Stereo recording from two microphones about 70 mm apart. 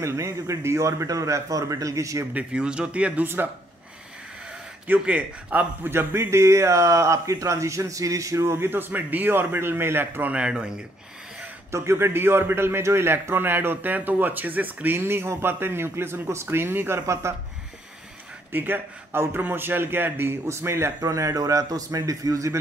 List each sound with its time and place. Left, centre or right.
0.0 s a man's voice: right
2.3 s speech: centre
4.8 s a man's voice: right
8.5 s a man's voice: right
10.3 s speech: centre
11.7 s a man's voice: right
15.0 s a man's voice: right
18.5 s a man's voice: right
21.0 s a man's voice: right